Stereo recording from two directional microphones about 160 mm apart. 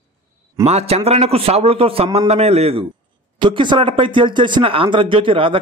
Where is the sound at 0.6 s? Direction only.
40° right (ahead or behind).